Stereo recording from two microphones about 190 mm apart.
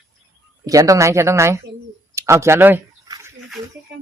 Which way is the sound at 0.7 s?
20° right (ahead or behind).